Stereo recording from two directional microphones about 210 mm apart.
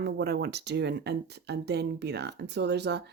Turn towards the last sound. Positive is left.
turn(degrees=-55)  # may be behind; listen again after turning